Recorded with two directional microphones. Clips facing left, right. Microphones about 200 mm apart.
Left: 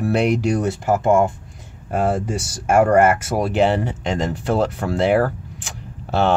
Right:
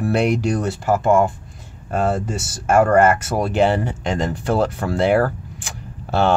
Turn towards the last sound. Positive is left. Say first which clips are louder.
# even
turn(degrees=0)  # may be behind; listen again after turning